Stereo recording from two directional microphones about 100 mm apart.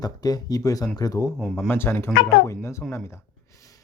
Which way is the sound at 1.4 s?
Centre (ahead or behind).